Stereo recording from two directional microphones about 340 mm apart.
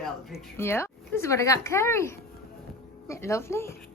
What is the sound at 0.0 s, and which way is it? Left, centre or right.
Speech, centre.